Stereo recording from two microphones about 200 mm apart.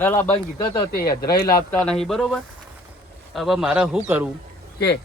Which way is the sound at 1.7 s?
5° left (ahead or behind).